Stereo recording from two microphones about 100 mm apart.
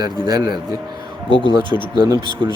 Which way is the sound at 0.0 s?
45° right (ahead or behind).